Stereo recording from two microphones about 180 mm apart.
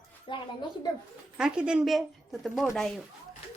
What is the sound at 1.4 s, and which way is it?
A woman's voice, 5° right (ahead or behind).